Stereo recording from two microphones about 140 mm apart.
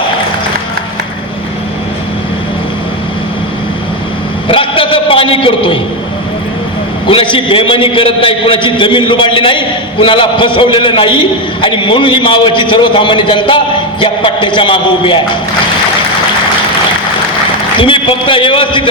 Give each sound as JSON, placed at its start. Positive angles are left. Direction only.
{"t": 4.4, "sound": "a sound", "side_deg": 40}
{"t": 7.1, "sound": "a man's voice", "side_deg": 40}
{"t": 17.7, "sound": "a man's voice", "side_deg": 40}